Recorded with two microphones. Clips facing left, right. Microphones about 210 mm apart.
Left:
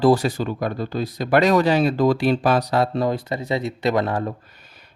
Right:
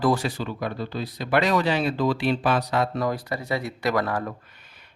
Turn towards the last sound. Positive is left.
turn(degrees=25)  # may be behind; listen again after turning